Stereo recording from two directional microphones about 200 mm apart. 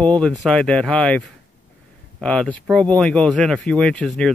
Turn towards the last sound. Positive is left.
turn(degrees=5)  # may be behind; listen again after turning